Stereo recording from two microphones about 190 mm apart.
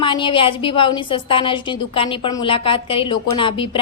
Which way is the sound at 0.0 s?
25° left (ahead or behind).